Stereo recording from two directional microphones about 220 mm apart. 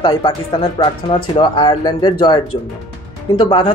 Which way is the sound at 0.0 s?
20° left (ahead or behind).